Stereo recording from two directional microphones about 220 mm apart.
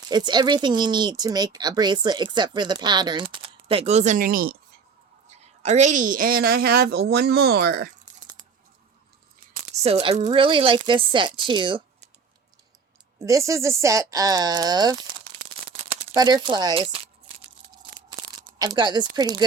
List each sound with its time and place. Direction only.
0.1 s speech: 20° right (ahead or behind); by 4.5 s 40° right (ahead or behind)
5.3 s a woman's voice: 30° right (ahead or behind); by 7.9 s 45° right (ahead or behind)
9.5 s speech: 30° right (ahead or behind)
13.1 s speech: 15° right (ahead or behind)
15.9 s crumpling: 20° right (ahead or behind)
18.6 s speech: 15° right (ahead or behind)